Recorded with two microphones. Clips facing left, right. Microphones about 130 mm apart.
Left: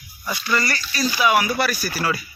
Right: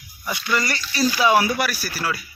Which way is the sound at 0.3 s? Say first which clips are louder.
Even; 15° right (ahead or behind).